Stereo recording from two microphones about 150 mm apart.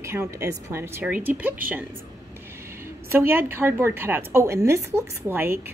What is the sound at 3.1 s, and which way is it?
A woman's voice, 15° right (ahead or behind).